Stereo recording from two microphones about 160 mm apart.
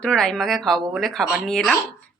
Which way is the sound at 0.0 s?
5° left (ahead or behind).